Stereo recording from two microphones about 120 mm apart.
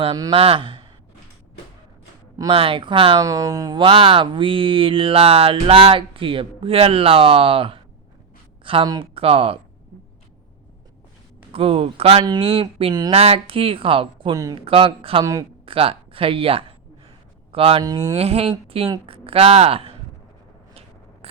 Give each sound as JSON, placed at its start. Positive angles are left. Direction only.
{"t": 0.3, "sound": "speech", "side_deg": -50}
{"t": 2.5, "sound": "speech", "side_deg": -50}
{"t": 3.2, "sound": "speech", "side_deg": -30}
{"t": 3.8, "sound": "a woman's voice", "side_deg": -50}
{"t": 11.5, "sound": "speech", "side_deg": -50}
{"t": 14.3, "sound": "speech", "side_deg": -30}
{"t": 14.6, "sound": "speech", "side_deg": -50}
{"t": 15.2, "sound": "speech", "side_deg": -30}
{"t": 15.6, "sound": "speech", "side_deg": -50}
{"t": 17.8, "sound": "speech", "side_deg": -30}
{"t": 18.1, "sound": "speech", "side_deg": -55}